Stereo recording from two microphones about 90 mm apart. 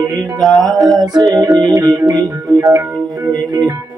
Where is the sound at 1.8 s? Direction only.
45° right (ahead or behind).